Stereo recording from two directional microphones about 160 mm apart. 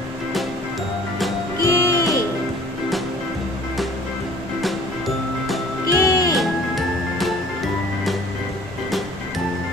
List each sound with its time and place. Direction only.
1.6 s music: 20° left (ahead or behind)
5.9 s music: 20° left (ahead or behind)
6.3 s music: centre (ahead or behind)